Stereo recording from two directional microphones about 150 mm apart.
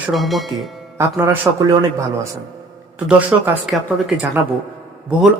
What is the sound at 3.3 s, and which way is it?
Speech, 10° right (ahead or behind).